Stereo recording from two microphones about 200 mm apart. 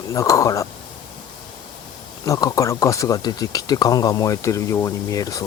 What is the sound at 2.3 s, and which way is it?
Speech, 15° left (ahead or behind).